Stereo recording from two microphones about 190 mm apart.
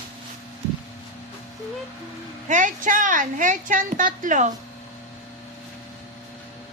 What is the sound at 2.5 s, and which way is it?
A woman's voice, 40° right (ahead or behind).